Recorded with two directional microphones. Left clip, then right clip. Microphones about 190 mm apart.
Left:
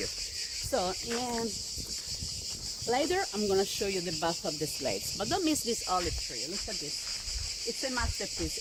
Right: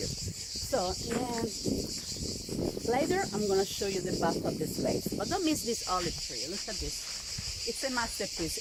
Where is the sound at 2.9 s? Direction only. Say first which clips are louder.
Left 1 dB; 45° left (ahead or behind).